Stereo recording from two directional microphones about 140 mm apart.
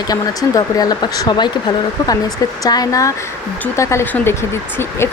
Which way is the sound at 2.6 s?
25° left (ahead or behind).